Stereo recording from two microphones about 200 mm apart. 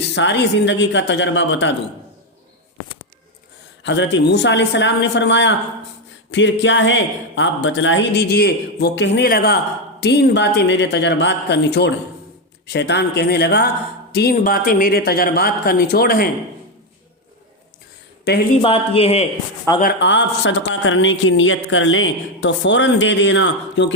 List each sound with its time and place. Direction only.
0.0 s speech: 60° left (ahead or behind)
3.8 s speech: 65° left (ahead or behind)
14.3 s speech: 45° left (ahead or behind)
18.3 s speech: 55° left (ahead or behind)
18.6 s speech: 30° left (ahead or behind)
19.8 s speech: 60° left (ahead or behind)